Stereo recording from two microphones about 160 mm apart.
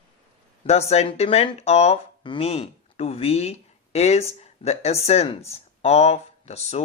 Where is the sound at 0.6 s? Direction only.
40° left (ahead or behind).